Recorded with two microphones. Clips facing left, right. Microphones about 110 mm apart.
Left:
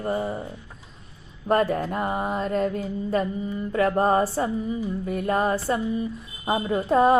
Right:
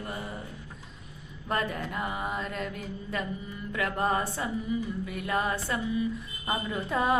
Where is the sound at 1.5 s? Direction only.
40° left (ahead or behind).